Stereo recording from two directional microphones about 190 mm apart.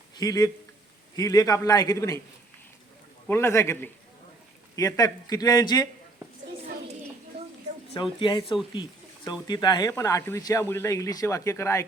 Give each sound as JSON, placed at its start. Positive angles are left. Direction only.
{"t": 0.2, "sound": "a man's voice", "side_deg": 20}
{"t": 3.2, "sound": "a man's voice", "side_deg": 15}
{"t": 8.2, "sound": "a man's voice", "side_deg": 25}